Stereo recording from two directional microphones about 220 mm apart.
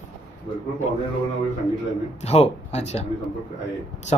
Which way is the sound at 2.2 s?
30° left (ahead or behind).